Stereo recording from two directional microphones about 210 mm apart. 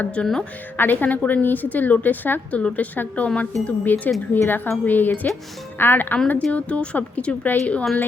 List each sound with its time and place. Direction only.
0.0 s a woman's voice: 5° left (ahead or behind)